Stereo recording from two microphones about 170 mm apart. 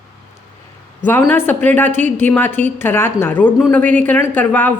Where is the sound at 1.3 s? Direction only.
10° left (ahead or behind).